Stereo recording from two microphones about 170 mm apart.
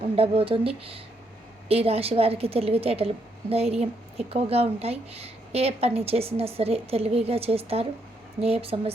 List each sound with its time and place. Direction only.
0.0 s a woman's voice: 35° right (ahead or behind)